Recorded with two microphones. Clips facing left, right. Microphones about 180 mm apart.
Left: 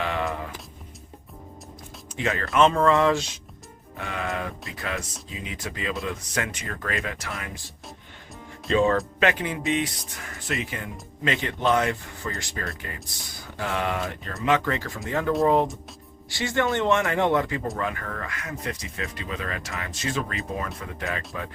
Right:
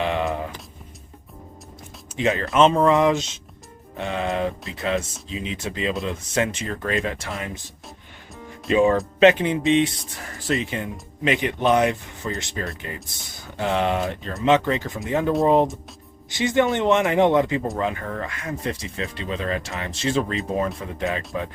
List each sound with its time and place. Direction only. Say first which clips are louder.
0.0 s music: right 4 dB; 20° right (ahead or behind)
2.1 s speech: right 3 dB; 20° right (ahead or behind)
8.7 s speech: right 3 dB; 15° right (ahead or behind)